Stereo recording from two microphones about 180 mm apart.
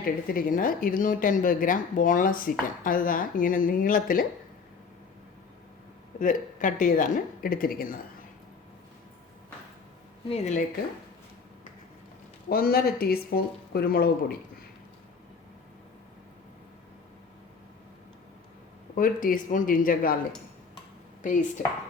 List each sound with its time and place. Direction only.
0.0 s speech: 55° left (ahead or behind)
6.1 s speech: 45° left (ahead or behind)
10.2 s a woman's voice: 35° left (ahead or behind)
12.5 s speech: 55° left (ahead or behind)
18.9 s speech: 50° left (ahead or behind)